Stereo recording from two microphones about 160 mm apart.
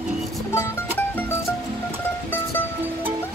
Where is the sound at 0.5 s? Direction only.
15° left (ahead or behind).